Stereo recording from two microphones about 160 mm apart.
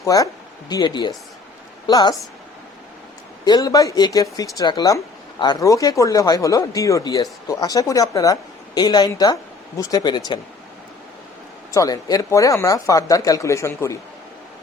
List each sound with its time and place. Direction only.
0.0 s speech: 20° left (ahead or behind)
3.4 s speech: 25° left (ahead or behind)
11.7 s speech: 20° left (ahead or behind)